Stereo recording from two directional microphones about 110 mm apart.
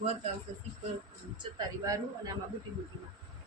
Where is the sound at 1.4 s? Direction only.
35° right (ahead or behind).